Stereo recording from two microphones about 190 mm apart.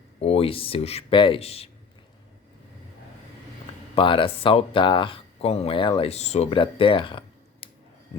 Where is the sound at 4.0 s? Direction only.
25° left (ahead or behind).